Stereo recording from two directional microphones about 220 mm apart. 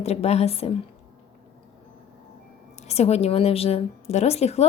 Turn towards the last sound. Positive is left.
turn(degrees=30)  # may be behind; listen again after turning